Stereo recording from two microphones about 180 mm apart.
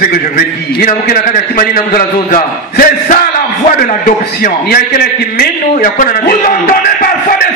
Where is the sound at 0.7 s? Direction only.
50° left (ahead or behind).